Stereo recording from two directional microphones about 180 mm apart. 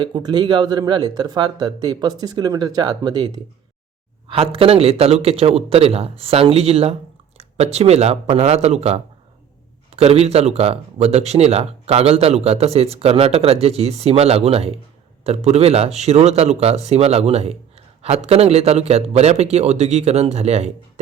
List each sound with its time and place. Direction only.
0.0 s a man's voice: 25° right (ahead or behind)